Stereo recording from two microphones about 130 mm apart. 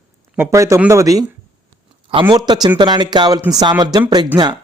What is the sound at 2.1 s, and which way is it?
Speech, 35° right (ahead or behind).